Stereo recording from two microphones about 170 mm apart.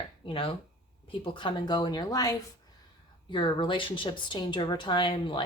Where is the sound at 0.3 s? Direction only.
30° left (ahead or behind).